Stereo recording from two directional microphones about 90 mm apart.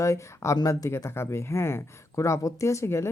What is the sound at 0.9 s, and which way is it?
Speech, 30° left (ahead or behind).